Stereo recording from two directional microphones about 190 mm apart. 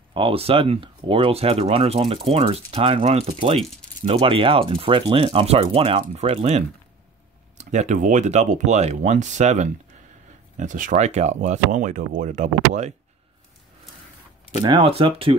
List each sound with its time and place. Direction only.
0.1 s speech: 30° right (ahead or behind)
14.6 s speech: 25° right (ahead or behind)